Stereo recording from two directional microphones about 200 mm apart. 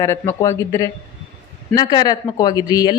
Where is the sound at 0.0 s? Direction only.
10° left (ahead or behind).